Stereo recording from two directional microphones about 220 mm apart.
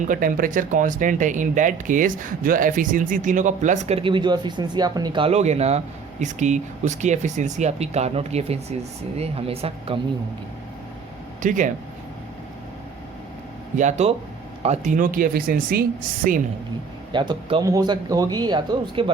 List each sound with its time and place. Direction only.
0.0 s speech: 35° right (ahead or behind)
11.4 s speech: 35° right (ahead or behind)
13.7 s speech: 30° right (ahead or behind)
17.1 s speech: 20° right (ahead or behind)